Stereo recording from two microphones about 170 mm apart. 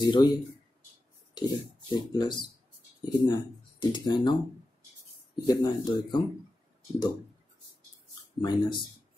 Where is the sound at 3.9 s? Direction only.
25° left (ahead or behind).